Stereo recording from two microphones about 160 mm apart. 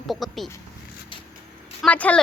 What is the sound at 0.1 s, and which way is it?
Speech, centre (ahead or behind).